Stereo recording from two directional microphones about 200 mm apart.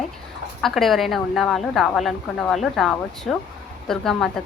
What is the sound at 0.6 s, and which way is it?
A woman's voice, centre (ahead or behind).